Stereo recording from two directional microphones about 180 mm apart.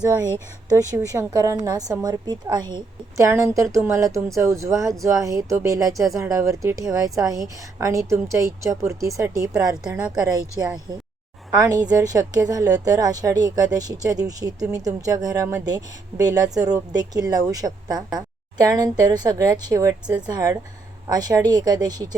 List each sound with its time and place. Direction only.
0.7 s a woman's voice: 20° right (ahead or behind)
11.5 s a woman's voice: 20° right (ahead or behind)